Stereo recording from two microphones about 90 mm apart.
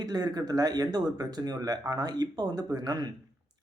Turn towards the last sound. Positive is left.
turn(degrees=-45)  # may be behind; listen again after turning